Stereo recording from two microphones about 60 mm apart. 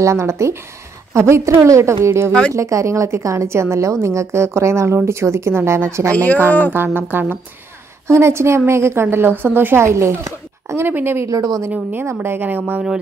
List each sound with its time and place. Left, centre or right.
0.0 s a woman's voice: right
6.1 s speech: left
6.7 s speech: right
8.1 s speech: right
9.0 s speech: right
9.8 s a woman's voice: right
10.9 s speech: right
11.2 s a woman's voice: right
11.7 s speech: right